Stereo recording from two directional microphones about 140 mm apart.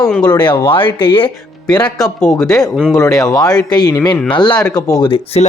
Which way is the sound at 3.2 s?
25° left (ahead or behind).